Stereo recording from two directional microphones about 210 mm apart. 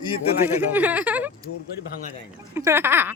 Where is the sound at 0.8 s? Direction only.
5° right (ahead or behind).